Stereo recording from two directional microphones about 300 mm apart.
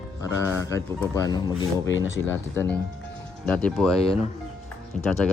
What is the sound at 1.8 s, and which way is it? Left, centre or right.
Speech, left.